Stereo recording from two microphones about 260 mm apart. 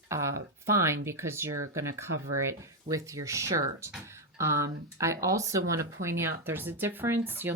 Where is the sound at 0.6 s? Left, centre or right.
Centre.